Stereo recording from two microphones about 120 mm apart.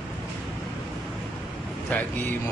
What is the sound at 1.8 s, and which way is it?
Speech, 15° left (ahead or behind).